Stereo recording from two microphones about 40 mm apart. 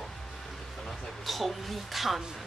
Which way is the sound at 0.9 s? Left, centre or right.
Centre.